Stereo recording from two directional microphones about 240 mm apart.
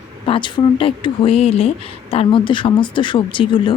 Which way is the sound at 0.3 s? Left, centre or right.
Centre.